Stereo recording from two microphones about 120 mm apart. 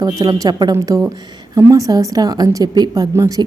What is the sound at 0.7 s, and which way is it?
A woman's voice, 25° right (ahead or behind).